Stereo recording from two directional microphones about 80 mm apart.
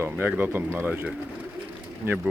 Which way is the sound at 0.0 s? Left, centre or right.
Right.